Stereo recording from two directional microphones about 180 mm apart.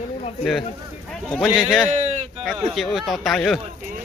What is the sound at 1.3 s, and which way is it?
Speech, centre (ahead or behind).